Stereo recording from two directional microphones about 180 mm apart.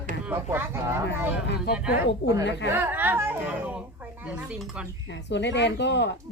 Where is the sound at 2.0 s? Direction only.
75° left (ahead or behind).